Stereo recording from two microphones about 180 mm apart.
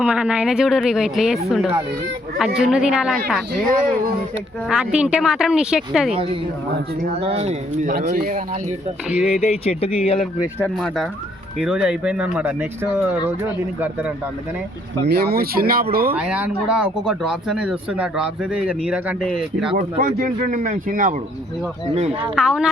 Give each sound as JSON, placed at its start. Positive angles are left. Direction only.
{"t": 0.0, "sound": "speech", "side_deg": -5}
{"t": 4.7, "sound": "speech", "side_deg": -5}
{"t": 7.3, "sound": "speech", "side_deg": -35}
{"t": 8.0, "sound": "speech", "side_deg": -50}
{"t": 9.2, "sound": "speech", "side_deg": 35}
{"t": 10.6, "sound": "speech", "side_deg": 0}
{"t": 15.0, "sound": "speech", "side_deg": -65}
{"t": 16.1, "sound": "speech", "side_deg": -5}
{"t": 19.7, "sound": "speech", "side_deg": -50}
{"t": 22.4, "sound": "speech", "side_deg": -5}